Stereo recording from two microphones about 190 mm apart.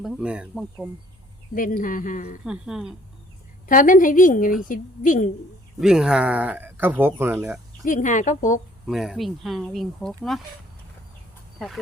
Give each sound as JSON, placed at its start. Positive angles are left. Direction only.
{"t": 0.0, "sound": "speech", "side_deg": -5}
{"t": 1.5, "sound": "a woman's voice", "side_deg": 45}
{"t": 2.4, "sound": "speech", "side_deg": -5}
{"t": 3.7, "sound": "a woman's voice", "side_deg": 45}
{"t": 5.8, "sound": "speech", "side_deg": -5}
{"t": 7.9, "sound": "a woman's voice", "side_deg": 40}
{"t": 8.9, "sound": "speech", "side_deg": 0}